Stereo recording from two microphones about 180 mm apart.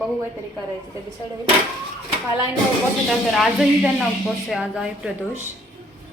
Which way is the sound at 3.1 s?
Centre (ahead or behind).